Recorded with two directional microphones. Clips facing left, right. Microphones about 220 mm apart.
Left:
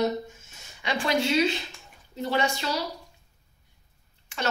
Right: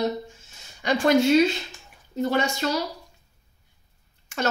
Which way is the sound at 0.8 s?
45° right (ahead or behind).